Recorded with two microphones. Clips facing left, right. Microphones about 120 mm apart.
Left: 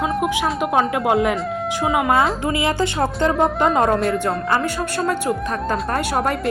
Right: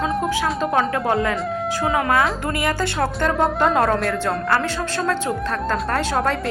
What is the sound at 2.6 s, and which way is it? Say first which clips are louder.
A woman's voice: left 1 dB; 20° left (ahead or behind).